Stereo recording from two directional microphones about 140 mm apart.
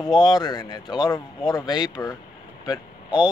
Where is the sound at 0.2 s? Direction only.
30° left (ahead or behind).